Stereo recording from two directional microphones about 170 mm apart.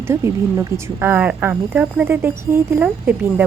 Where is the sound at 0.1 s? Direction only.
15° right (ahead or behind).